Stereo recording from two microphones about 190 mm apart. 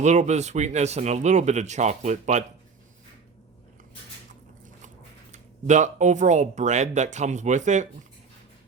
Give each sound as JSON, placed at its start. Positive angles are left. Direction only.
{"t": 0.0, "sound": "speech", "side_deg": -35}
{"t": 5.3, "sound": "speech", "side_deg": -40}